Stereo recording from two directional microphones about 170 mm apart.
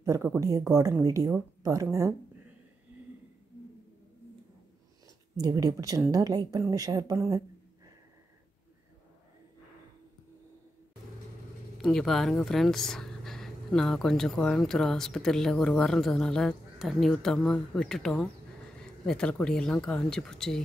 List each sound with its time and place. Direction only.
0.0 s a woman's voice: 20° right (ahead or behind)
5.4 s a woman's voice: 20° right (ahead or behind)
11.8 s speech: centre (ahead or behind)